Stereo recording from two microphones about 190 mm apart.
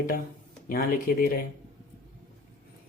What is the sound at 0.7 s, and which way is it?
Speech, 50° left (ahead or behind).